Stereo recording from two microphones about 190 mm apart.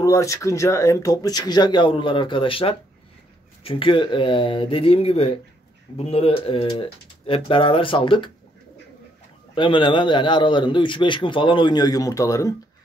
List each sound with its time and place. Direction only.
0.0 s a man's voice: 15° left (ahead or behind)
9.6 s a man's voice: 25° left (ahead or behind)